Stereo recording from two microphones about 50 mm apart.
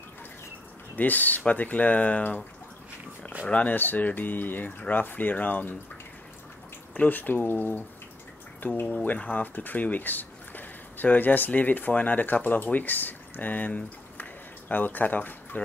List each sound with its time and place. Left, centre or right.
0.9 s speech: left
3.4 s speech: left
3.7 s speech: left
6.9 s speech: left